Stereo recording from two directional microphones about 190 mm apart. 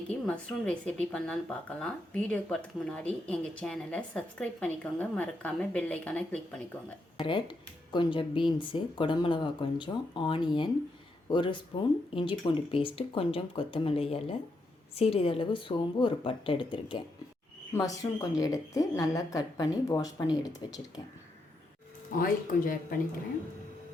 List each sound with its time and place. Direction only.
0.1 s a woman's voice: 5° left (ahead or behind)
7.2 s speech: 25° left (ahead or behind)
22.1 s speech: 45° left (ahead or behind)